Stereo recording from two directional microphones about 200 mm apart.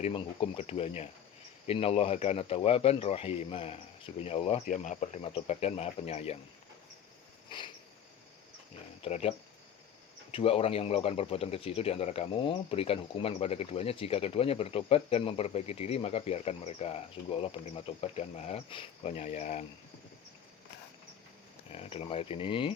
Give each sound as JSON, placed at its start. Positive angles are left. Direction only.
{"t": 0.0, "sound": "speech", "side_deg": 30}
{"t": 7.5, "sound": "speech", "side_deg": 25}
{"t": 9.0, "sound": "speech", "side_deg": 30}
{"t": 10.3, "sound": "speech", "side_deg": 30}
{"t": 21.7, "sound": "speech", "side_deg": 30}